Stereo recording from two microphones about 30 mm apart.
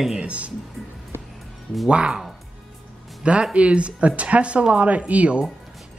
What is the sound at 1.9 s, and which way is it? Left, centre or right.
Speech, right.